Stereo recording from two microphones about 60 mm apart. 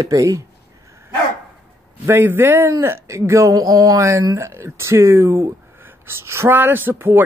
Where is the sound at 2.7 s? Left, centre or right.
Right.